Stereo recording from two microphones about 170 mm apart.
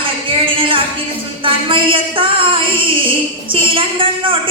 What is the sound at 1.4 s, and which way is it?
A woman's voice, 30° right (ahead or behind).